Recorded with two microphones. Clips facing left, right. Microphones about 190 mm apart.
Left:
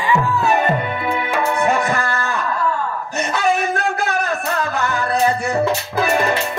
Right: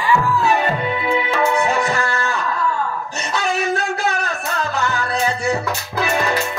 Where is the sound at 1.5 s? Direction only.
55° left (ahead or behind).